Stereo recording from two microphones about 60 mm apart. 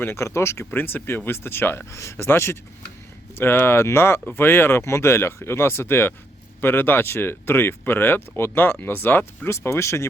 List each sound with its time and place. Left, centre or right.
0.0 s speech: left
1.9 s speech: left
9.5 s speech: left